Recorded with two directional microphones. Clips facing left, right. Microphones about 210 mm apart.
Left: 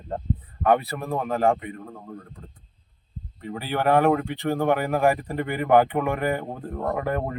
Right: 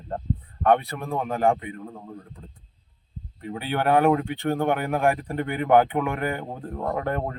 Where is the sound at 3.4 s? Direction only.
Centre (ahead or behind).